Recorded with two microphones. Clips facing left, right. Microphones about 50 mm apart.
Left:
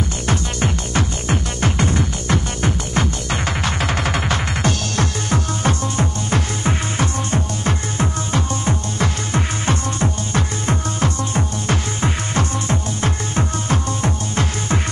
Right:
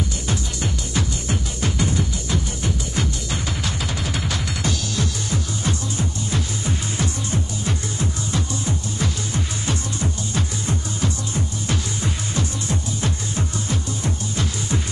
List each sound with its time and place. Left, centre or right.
0.3 s music: left